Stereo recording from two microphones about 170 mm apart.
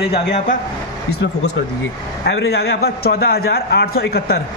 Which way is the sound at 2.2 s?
75° left (ahead or behind).